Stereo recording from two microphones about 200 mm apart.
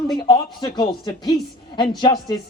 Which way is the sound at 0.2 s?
20° left (ahead or behind).